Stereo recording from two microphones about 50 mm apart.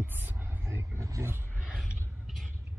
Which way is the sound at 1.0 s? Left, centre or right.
Right.